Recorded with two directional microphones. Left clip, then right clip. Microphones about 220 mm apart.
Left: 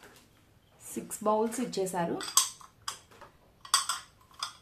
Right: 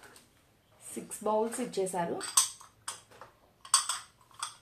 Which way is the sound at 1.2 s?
40° left (ahead or behind).